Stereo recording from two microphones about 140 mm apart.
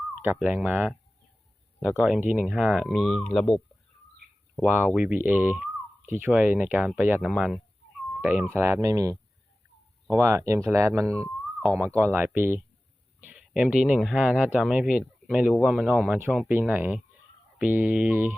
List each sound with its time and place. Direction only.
0.3 s speech: 10° right (ahead or behind)
4.9 s speech: 5° right (ahead or behind)
8.5 s speech: 20° right (ahead or behind)
13.2 s speech: 5° right (ahead or behind)